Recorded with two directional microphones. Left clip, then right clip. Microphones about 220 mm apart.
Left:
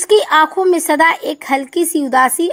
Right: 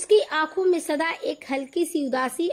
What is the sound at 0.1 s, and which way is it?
Speech, 45° left (ahead or behind).